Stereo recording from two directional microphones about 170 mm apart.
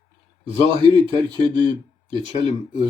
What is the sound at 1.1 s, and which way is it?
Speech, 30° right (ahead or behind).